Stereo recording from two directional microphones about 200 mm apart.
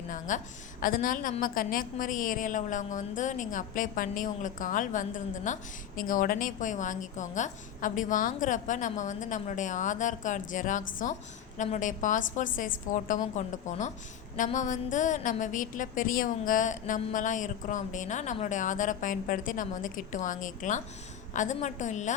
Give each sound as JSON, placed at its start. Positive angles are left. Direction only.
{"t": 0.1, "sound": "a woman's voice", "side_deg": 40}